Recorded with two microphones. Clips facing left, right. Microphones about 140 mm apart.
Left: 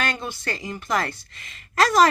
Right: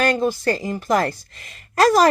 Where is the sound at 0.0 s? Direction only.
40° right (ahead or behind).